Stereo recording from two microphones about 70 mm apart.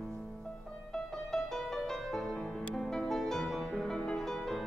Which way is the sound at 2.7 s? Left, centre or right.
Centre.